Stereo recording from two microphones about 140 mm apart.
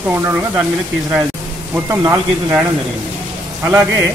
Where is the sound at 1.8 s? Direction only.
15° right (ahead or behind).